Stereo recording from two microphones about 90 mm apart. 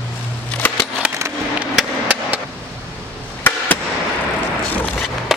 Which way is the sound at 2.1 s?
20° right (ahead or behind).